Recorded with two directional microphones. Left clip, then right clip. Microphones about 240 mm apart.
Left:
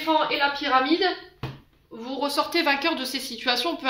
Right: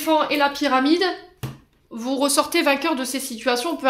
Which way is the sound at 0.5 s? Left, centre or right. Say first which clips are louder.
Right 3 dB; right.